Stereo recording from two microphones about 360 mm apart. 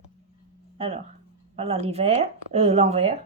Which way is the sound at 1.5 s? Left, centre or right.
Centre.